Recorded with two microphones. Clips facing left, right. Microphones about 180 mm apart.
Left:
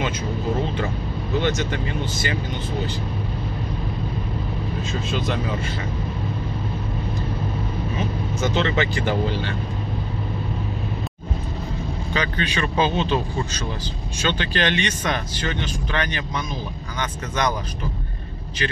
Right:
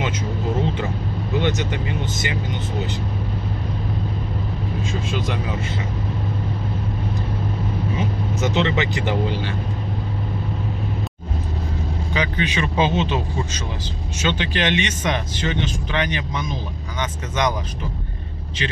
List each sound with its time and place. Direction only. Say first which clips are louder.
1.4 s speech: even; 15° right (ahead or behind)
5.1 s speech: left 2 dB; 10° right (ahead or behind)
8.4 s speech: right 1 dB; 20° right (ahead or behind)
12.1 s speech: right 2 dB; 15° right (ahead or behind)
14.2 s speech: right 1 dB; 15° right (ahead or behind)